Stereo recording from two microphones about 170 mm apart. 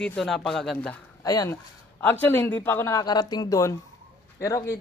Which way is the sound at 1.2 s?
20° left (ahead or behind).